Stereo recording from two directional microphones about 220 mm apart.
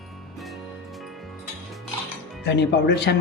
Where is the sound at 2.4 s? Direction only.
50° left (ahead or behind).